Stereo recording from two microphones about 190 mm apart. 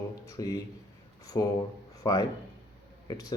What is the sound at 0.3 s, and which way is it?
Speech, 15° left (ahead or behind).